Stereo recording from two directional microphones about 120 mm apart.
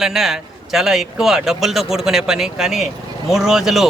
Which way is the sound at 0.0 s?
5° right (ahead or behind).